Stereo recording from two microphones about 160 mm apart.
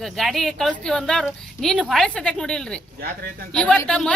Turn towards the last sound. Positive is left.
turn(degrees=5)  # may be behind; listen again after turning